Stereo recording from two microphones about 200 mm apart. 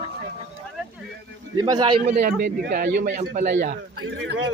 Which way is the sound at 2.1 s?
45° right (ahead or behind).